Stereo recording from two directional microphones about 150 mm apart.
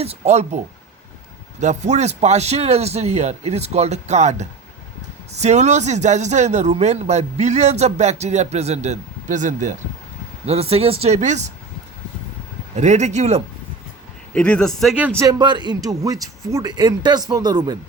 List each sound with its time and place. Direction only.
0.0 s speech: 45° right (ahead or behind)
1.6 s speech: 50° right (ahead or behind)
10.4 s speech: 45° right (ahead or behind)
12.7 s speech: 50° right (ahead or behind)
14.3 s speech: 5° left (ahead or behind)
15.2 s speech: 25° right (ahead or behind)